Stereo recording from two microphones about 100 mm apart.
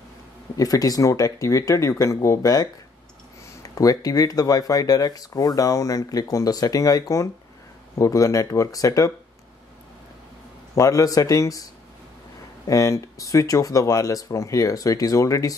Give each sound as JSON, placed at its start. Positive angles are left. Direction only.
{"t": 0.6, "sound": "speech", "side_deg": 35}
{"t": 10.8, "sound": "speech", "side_deg": 35}
{"t": 12.6, "sound": "speech", "side_deg": 35}